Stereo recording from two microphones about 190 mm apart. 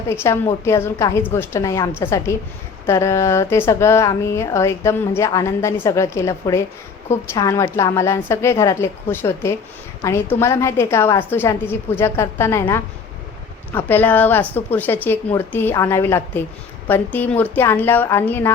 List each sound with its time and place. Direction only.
0.1 s speech: 15° left (ahead or behind)